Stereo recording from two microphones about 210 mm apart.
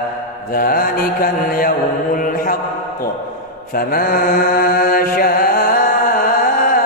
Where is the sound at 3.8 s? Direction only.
45° left (ahead or behind).